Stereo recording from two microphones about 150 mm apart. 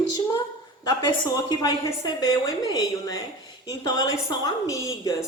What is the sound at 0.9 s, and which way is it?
A woman's voice, 25° left (ahead or behind).